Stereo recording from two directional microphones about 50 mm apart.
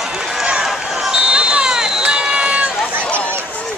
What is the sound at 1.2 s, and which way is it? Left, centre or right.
Run, centre.